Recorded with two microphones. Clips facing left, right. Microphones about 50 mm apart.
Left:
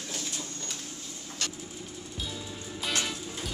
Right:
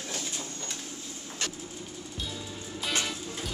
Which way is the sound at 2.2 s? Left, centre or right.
Centre.